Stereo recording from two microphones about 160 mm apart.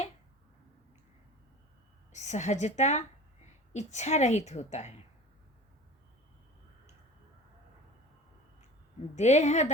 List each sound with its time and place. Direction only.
2.1 s a woman's voice: 45° left (ahead or behind)
9.1 s a woman's voice: 45° left (ahead or behind)